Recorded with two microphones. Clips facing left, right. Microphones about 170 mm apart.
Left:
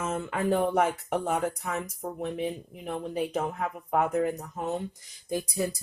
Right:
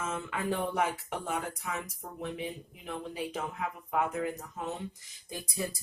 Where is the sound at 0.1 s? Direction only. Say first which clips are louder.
Left 9 dB; 40° left (ahead or behind).